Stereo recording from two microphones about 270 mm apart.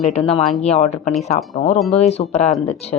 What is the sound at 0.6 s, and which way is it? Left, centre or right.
Speech, left.